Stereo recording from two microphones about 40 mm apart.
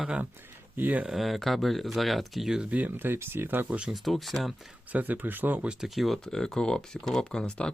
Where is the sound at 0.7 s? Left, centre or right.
Right.